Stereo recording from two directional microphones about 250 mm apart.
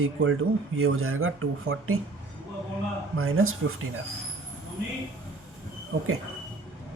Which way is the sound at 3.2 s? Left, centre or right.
Right.